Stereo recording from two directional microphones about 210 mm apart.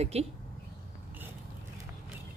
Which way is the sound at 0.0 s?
30° right (ahead or behind).